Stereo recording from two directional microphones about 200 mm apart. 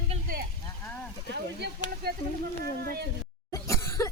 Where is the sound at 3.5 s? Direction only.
15° left (ahead or behind).